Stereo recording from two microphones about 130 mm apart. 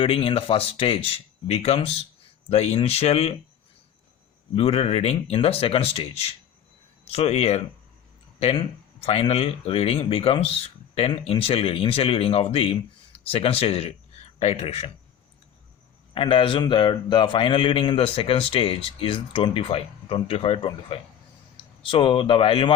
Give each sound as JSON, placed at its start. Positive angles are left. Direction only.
{"t": 0.0, "sound": "speech", "side_deg": 45}
{"t": 4.5, "sound": "speech", "side_deg": 50}
{"t": 16.1, "sound": "speech", "side_deg": 45}